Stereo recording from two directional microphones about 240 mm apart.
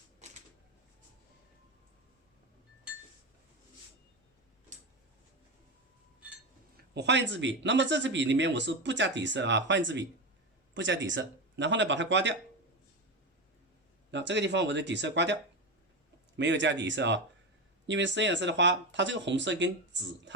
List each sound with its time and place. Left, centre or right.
6.9 s speech: right
14.1 s speech: right
16.4 s speech: right